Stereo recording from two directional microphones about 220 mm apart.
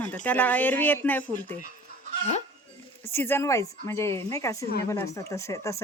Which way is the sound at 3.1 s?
10° left (ahead or behind).